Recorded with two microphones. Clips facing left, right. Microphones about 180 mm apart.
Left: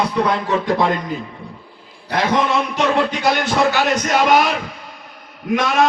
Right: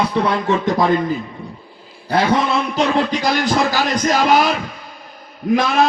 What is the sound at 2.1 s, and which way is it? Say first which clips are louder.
Speech: right 2 dB; 35° right (ahead or behind).